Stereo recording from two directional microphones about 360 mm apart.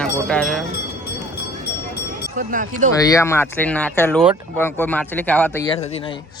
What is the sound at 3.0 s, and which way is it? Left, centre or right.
Speech, centre.